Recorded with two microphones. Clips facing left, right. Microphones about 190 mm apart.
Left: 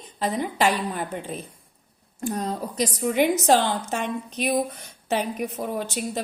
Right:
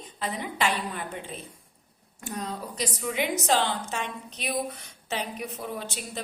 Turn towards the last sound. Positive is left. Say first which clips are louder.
# left 7 dB
turn(degrees=45)  # may be behind; listen again after turning